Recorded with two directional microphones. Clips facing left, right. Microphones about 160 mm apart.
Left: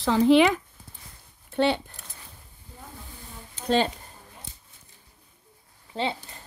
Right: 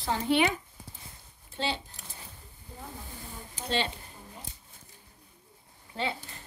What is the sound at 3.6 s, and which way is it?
Speech, 45° left (ahead or behind).